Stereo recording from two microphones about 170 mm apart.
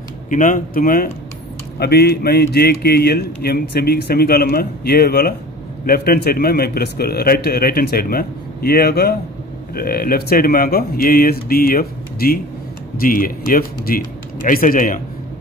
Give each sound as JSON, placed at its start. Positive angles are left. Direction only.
{"t": 0.3, "sound": "a man's voice", "side_deg": 50}
{"t": 1.8, "sound": "a man's voice", "side_deg": 70}